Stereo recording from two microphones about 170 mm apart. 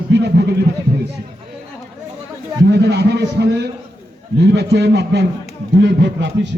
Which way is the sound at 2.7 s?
75° right (ahead or behind).